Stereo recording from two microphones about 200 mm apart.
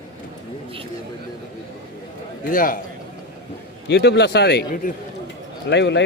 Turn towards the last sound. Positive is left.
turn(degrees=60)  # may be behind; listen again after turning